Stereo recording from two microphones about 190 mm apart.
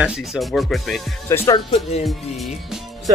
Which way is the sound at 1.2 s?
15° left (ahead or behind).